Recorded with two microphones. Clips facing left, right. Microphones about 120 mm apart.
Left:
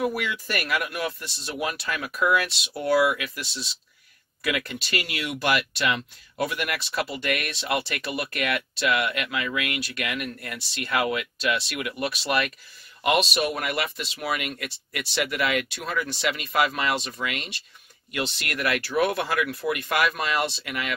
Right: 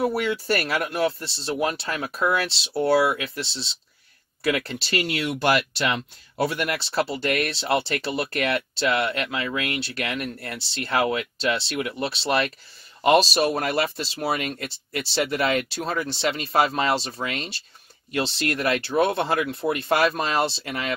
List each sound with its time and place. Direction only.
0.0 s speech: 35° right (ahead or behind)